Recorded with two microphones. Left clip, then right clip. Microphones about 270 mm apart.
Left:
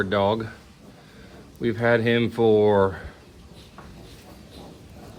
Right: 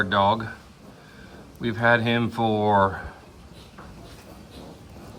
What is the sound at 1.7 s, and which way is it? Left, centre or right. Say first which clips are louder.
Speech: right 1 dB; centre.